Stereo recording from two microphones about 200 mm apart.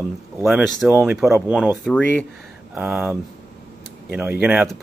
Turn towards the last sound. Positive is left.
turn(degrees=-5)  # may be behind; listen again after turning